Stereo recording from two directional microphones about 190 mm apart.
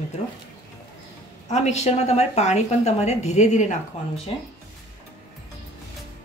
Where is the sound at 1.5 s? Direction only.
40° left (ahead or behind).